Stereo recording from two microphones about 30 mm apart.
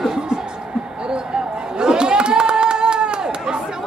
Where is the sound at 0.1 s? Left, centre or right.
Right.